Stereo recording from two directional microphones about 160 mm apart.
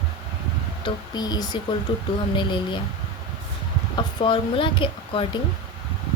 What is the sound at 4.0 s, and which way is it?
Speech, 30° left (ahead or behind).